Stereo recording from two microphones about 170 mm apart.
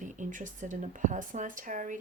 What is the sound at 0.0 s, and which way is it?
Speech, 50° right (ahead or behind).